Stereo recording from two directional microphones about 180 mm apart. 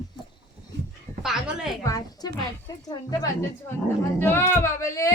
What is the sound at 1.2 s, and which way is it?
Speech, centre (ahead or behind).